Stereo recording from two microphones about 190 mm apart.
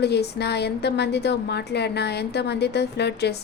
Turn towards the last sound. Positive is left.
turn(degrees=60)  # may be behind; listen again after turning